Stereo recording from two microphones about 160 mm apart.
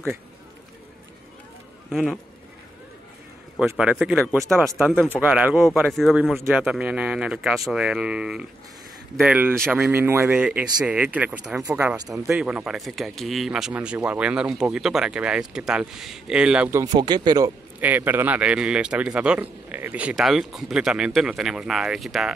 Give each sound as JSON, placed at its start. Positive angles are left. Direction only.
{"t": 1.9, "sound": "speech", "side_deg": 0}
{"t": 3.5, "sound": "a man's voice", "side_deg": -5}
{"t": 16.8, "sound": "speech", "side_deg": -25}
{"t": 17.7, "sound": "a man's voice", "side_deg": -10}